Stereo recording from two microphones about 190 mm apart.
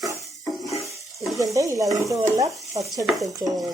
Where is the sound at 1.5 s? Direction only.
15° right (ahead or behind).